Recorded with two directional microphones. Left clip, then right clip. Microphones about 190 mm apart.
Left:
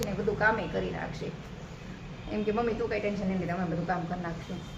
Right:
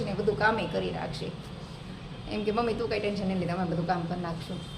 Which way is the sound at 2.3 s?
10° right (ahead or behind).